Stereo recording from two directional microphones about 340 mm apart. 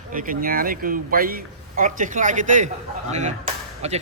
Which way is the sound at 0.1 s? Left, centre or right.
Right.